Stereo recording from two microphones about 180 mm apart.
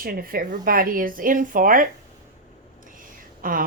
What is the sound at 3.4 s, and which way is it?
Speech, 50° right (ahead or behind).